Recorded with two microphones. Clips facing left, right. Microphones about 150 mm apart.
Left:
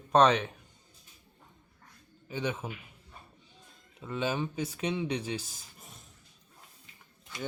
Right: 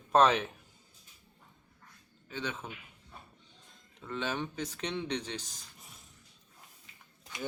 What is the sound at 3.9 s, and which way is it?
Speech, 10° left (ahead or behind).